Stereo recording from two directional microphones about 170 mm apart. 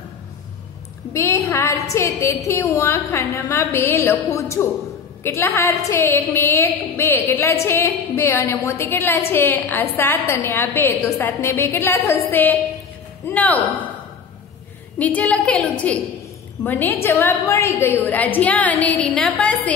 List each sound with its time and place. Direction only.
1.1 s a woman's voice: 15° left (ahead or behind)
15.0 s a woman's voice: 10° left (ahead or behind)